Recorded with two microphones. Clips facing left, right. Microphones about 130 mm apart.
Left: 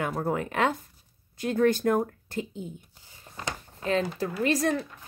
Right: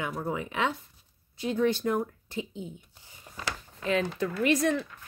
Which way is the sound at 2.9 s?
20° right (ahead or behind).